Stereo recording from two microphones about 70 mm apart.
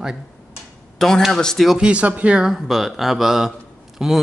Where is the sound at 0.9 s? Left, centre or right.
Centre.